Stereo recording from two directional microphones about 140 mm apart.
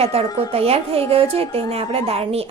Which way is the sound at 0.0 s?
45° right (ahead or behind).